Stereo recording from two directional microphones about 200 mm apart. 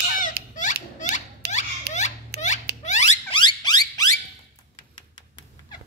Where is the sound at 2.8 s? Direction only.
35° left (ahead or behind).